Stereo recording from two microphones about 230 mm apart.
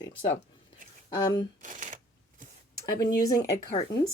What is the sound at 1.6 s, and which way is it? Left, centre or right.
Shuffling cards, right.